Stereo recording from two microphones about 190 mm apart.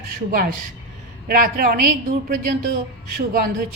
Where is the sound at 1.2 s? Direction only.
50° right (ahead or behind).